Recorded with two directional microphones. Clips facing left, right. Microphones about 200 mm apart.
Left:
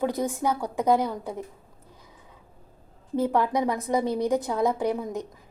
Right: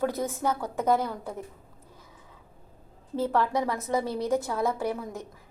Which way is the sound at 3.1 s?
15° left (ahead or behind).